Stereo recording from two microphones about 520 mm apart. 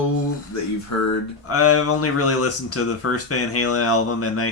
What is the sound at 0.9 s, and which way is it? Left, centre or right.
Speech, left.